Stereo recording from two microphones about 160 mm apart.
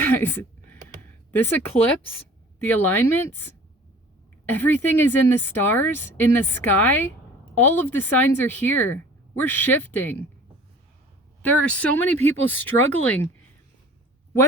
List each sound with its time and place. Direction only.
0.0 s a sound: 10° left (ahead or behind)
1.4 s speech: 10° left (ahead or behind)
4.6 s speech: 10° left (ahead or behind)
11.4 s speech: 10° left (ahead or behind)